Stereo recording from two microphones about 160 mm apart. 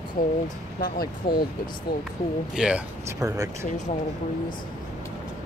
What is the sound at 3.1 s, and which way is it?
Speech, 20° right (ahead or behind).